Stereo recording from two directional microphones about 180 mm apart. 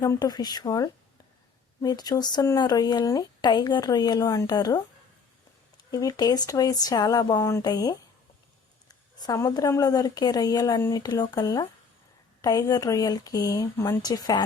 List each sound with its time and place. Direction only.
0.0 s speech: 20° left (ahead or behind)
5.9 s speech: 20° left (ahead or behind)